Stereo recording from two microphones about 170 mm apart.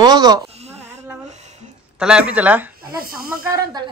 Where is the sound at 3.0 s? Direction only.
60° right (ahead or behind).